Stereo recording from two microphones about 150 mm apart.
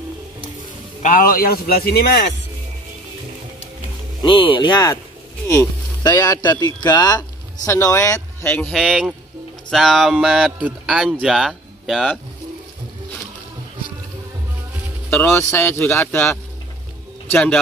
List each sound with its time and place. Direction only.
1.0 s a man's voice: 65° left (ahead or behind); by 2.1 s 90° left
4.2 s speech: 35° left (ahead or behind); by 8.6 s 20° left (ahead or behind)
8.6 s speech: centre (ahead or behind)
15.0 s speech: 15° left (ahead or behind)
17.3 s speech: 5° left (ahead or behind)